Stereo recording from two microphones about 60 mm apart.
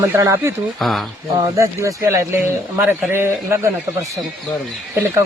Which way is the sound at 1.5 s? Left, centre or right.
Right.